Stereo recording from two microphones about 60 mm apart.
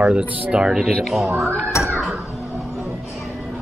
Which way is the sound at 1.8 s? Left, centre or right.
Left.